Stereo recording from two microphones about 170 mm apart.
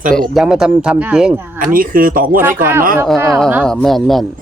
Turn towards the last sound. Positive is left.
turn(degrees=0)  # may be behind; listen again after turning